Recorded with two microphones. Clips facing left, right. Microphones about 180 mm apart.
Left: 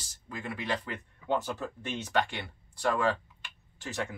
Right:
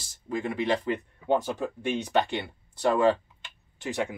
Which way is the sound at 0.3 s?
25° right (ahead or behind).